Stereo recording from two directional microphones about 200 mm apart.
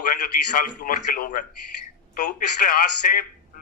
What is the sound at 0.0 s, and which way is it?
A man's voice, 40° left (ahead or behind).